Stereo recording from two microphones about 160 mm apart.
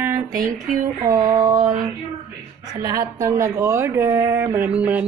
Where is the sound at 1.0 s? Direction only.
25° right (ahead or behind).